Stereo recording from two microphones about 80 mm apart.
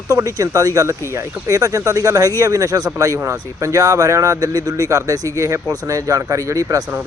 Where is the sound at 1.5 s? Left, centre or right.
Right.